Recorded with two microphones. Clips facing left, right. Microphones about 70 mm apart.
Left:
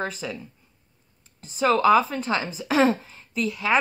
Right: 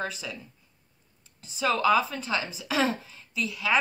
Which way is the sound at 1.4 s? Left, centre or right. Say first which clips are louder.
Left 5 dB; left.